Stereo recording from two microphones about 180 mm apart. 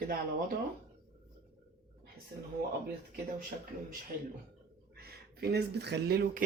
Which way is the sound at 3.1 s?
50° right (ahead or behind).